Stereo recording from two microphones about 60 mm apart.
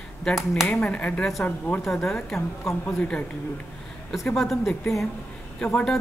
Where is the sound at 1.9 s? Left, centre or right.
Centre.